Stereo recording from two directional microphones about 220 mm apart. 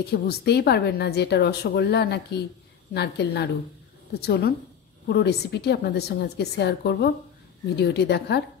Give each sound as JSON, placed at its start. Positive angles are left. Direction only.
{"t": 0.1, "sound": "a woman's voice", "side_deg": 50}